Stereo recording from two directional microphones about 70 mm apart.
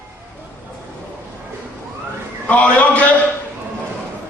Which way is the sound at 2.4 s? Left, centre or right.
Centre.